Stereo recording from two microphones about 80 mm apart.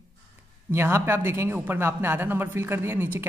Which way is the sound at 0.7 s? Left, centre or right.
Right.